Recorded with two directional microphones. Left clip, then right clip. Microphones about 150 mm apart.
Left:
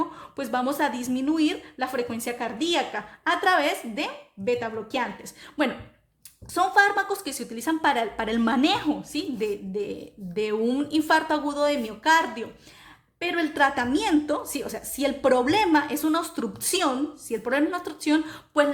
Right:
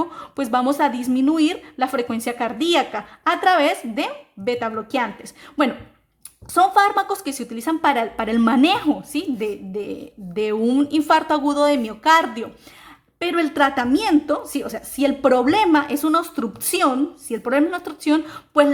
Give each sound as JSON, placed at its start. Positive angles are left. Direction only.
{"t": 0.1, "sound": "a woman's voice", "side_deg": -40}